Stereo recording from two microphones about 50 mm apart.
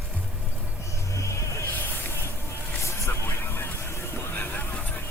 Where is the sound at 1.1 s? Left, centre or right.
Left.